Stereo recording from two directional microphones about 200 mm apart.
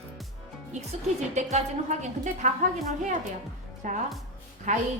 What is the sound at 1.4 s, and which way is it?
A woman's voice, 35° right (ahead or behind).